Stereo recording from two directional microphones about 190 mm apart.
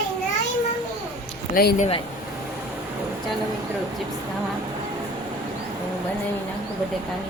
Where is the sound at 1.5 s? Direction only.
50° left (ahead or behind).